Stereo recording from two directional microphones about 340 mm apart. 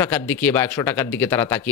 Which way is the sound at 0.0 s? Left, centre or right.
Centre.